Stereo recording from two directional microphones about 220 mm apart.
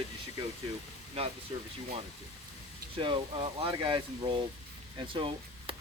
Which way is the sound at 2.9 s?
20° right (ahead or behind).